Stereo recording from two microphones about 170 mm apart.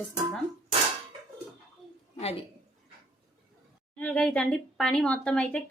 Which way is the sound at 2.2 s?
35° left (ahead or behind).